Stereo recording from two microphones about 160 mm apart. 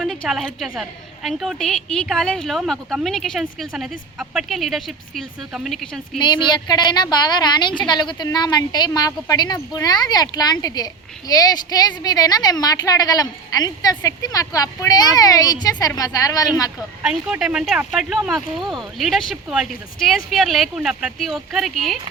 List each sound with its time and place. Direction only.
0.0 s a woman's voice: centre (ahead or behind)
6.1 s speech: 30° left (ahead or behind)
16.7 s a woman's voice: 5° right (ahead or behind)